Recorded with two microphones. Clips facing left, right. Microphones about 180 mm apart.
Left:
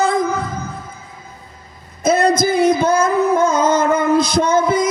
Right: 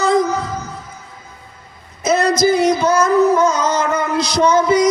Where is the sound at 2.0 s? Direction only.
55° left (ahead or behind).